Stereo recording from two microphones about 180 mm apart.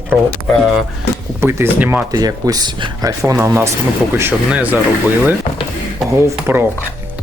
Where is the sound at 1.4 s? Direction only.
15° right (ahead or behind).